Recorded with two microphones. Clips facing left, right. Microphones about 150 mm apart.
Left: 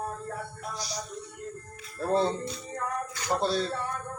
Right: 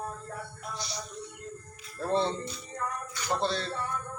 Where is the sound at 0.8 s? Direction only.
35° left (ahead or behind).